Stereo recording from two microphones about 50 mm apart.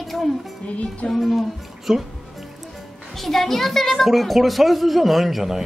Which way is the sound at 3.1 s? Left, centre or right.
Centre.